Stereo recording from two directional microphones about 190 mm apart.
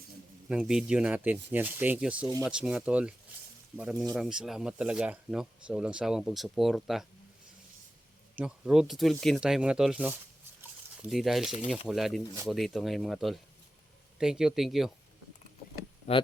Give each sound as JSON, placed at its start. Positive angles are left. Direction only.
{"t": 0.4, "sound": "speech", "side_deg": -5}
{"t": 8.4, "sound": "speech", "side_deg": -5}
{"t": 16.1, "sound": "speech", "side_deg": 35}